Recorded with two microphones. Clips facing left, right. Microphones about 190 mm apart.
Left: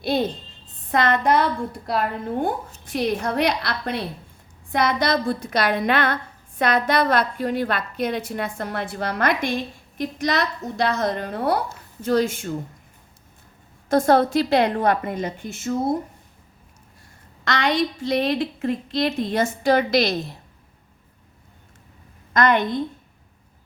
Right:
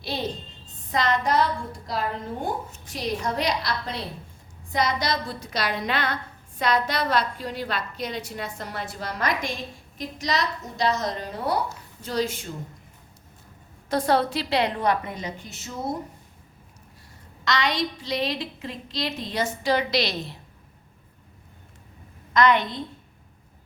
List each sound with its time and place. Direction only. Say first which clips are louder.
0.0 s a woman's voice: left 7 dB; 55° left (ahead or behind)
13.9 s a woman's voice: left 6 dB; 45° left (ahead or behind)
17.4 s a woman's voice: left 4 dB; 55° left (ahead or behind)
22.3 s a woman's voice: left 1 dB; 50° left (ahead or behind)